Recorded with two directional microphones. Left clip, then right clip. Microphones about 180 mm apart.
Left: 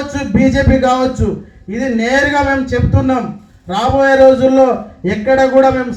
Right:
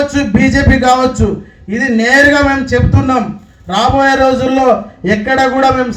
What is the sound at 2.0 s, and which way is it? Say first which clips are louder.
Speech: right 5 dB; 50° right (ahead or behind).